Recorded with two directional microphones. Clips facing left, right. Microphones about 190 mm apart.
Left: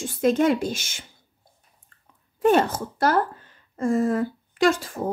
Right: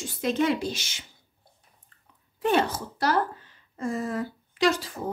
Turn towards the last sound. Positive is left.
turn(degrees=50)  # may be behind; listen again after turning